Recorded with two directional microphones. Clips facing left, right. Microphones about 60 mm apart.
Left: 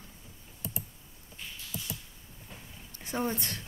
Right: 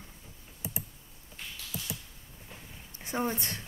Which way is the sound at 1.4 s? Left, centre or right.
Right.